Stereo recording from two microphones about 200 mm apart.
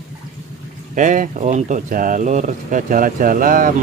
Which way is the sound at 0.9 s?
40° right (ahead or behind).